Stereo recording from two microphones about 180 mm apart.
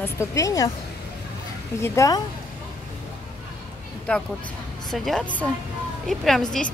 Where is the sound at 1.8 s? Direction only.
15° left (ahead or behind).